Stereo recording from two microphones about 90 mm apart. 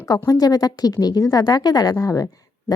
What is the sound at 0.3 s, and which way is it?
A woman's voice, 45° left (ahead or behind).